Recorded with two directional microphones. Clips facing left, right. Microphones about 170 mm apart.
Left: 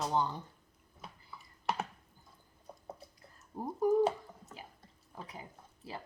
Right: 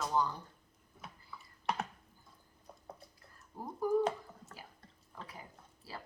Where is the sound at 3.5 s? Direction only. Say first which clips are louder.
Left 3 dB; 20° left (ahead or behind).